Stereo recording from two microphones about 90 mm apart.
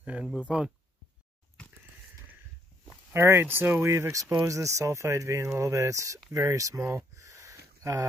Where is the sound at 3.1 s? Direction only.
30° right (ahead or behind).